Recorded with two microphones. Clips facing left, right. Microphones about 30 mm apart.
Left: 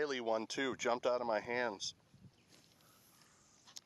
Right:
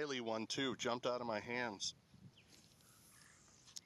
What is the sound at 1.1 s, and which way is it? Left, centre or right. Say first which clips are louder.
Speech: left 5 dB; centre.